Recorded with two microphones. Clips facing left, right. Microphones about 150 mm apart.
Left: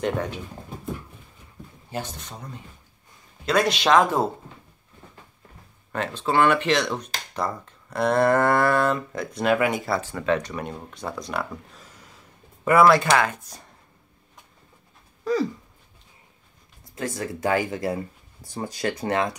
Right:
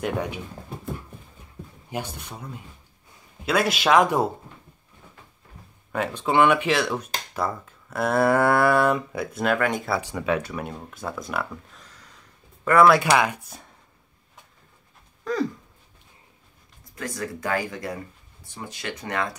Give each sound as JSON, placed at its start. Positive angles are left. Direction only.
{"t": 0.0, "sound": "speech", "side_deg": -10}
{"t": 1.9, "sound": "speech", "side_deg": -10}
{"t": 5.9, "sound": "speech", "side_deg": -10}
{"t": 9.9, "sound": "speech", "side_deg": -15}
{"t": 13.0, "sound": "speech", "side_deg": -10}
{"t": 15.3, "sound": "a sound", "side_deg": 5}
{"t": 16.9, "sound": "speech", "side_deg": 25}
{"t": 18.4, "sound": "speech", "side_deg": 40}